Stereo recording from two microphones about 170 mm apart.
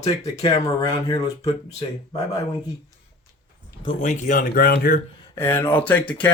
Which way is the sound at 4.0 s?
45° left (ahead or behind).